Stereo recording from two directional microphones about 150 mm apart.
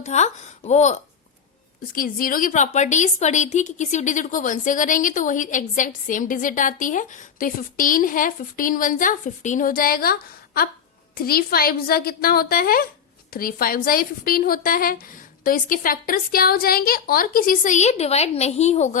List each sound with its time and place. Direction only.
0.0 s a woman's voice: 50° left (ahead or behind)
1.9 s a woman's voice: 70° left (ahead or behind); by 18.9 s 50° left (ahead or behind)